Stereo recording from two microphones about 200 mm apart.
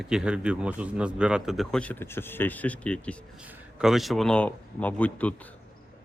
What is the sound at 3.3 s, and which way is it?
A man's voice, 5° right (ahead or behind).